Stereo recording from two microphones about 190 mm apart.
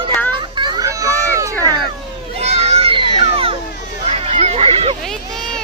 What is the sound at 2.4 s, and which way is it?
Children playing, 35° right (ahead or behind).